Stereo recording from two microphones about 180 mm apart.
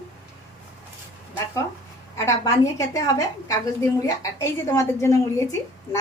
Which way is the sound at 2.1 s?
15° left (ahead or behind).